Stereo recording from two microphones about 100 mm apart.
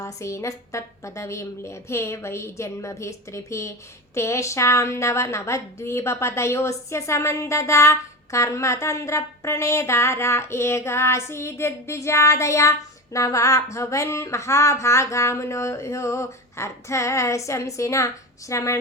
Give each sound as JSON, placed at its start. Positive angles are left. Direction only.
{"t": 0.0, "sound": "a woman's voice", "side_deg": 30}